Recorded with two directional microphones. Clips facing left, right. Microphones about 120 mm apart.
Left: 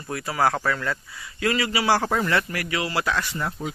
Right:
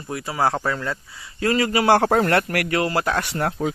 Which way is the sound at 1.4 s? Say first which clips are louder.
Right 4 dB; 40° right (ahead or behind).